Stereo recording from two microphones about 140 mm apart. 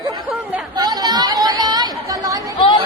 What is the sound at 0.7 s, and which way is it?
Chatter, 30° right (ahead or behind).